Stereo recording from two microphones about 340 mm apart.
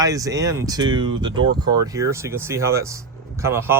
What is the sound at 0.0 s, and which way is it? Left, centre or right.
A man's voice, centre.